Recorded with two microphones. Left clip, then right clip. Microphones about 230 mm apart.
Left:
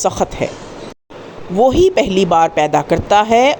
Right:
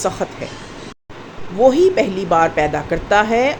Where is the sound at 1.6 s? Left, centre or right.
Left.